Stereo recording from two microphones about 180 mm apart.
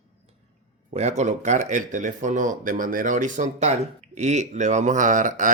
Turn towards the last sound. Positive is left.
turn(degrees=-45)  # may be behind; listen again after turning